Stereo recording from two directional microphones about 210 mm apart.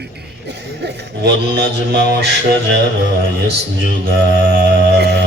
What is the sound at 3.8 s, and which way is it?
Music, 55° right (ahead or behind).